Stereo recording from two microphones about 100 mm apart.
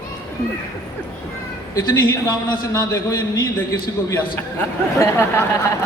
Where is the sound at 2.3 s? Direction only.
40° left (ahead or behind).